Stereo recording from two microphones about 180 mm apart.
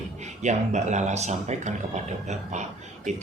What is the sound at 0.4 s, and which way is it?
Speech, 40° right (ahead or behind).